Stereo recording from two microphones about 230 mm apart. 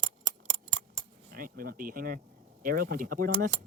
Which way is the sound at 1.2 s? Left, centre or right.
Right.